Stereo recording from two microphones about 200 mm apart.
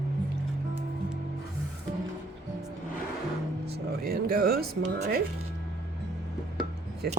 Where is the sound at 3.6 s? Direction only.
55° right (ahead or behind).